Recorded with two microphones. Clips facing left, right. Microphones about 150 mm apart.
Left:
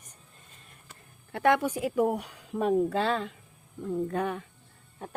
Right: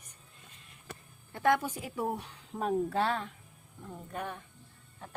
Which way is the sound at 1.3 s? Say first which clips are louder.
Left 4 dB; 75° left (ahead or behind).